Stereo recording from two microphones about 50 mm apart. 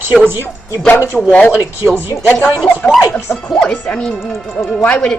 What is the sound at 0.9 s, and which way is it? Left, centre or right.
Speech, left.